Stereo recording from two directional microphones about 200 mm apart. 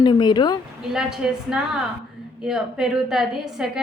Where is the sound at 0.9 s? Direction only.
5° right (ahead or behind).